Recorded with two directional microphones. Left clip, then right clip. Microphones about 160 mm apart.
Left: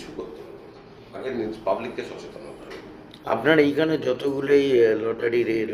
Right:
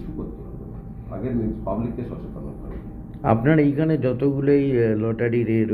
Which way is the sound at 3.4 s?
25° left (ahead or behind).